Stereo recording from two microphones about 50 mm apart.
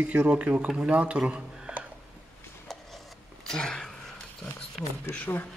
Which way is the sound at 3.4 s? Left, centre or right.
Centre.